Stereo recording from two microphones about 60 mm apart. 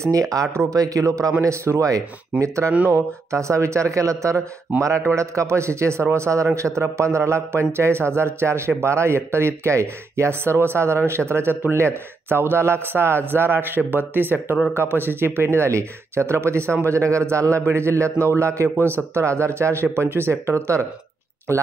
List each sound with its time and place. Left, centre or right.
0.0 s a man's voice: right
1.4 s a man's voice: right
4.7 s a man's voice: right
5.1 s a man's voice: right